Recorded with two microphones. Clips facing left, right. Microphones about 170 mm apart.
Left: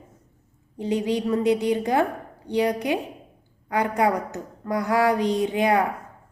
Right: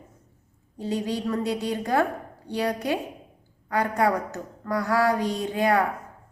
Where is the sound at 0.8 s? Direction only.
20° left (ahead or behind).